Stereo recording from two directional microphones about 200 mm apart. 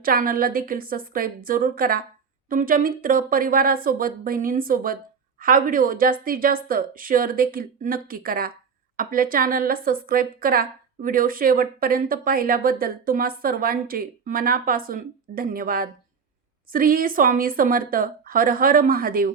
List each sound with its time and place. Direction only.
0.0 s a woman's voice: 45° right (ahead or behind)